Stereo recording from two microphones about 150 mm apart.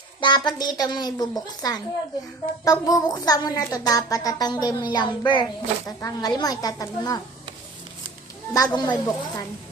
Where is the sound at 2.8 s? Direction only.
25° left (ahead or behind).